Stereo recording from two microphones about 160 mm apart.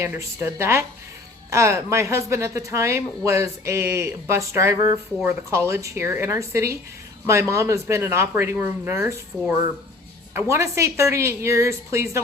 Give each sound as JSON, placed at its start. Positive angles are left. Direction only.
{"t": 0.0, "sound": "a woman's voice", "side_deg": -15}